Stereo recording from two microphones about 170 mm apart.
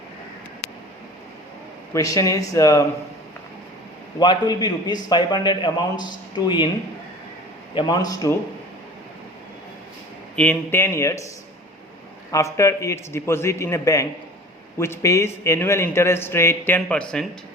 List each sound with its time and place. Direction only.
1.9 s a man's voice: 20° left (ahead or behind)
4.2 s a man's voice: 25° left (ahead or behind)
7.8 s a man's voice: 25° left (ahead or behind)
10.3 s a man's voice: 10° left (ahead or behind)
12.3 s a man's voice: 20° left (ahead or behind)